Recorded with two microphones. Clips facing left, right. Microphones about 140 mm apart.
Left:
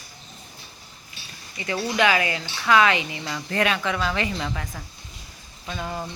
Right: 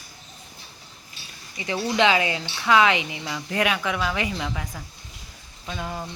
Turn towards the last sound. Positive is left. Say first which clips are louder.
# left 1 dB
turn(degrees=0)  # may be behind; listen again after turning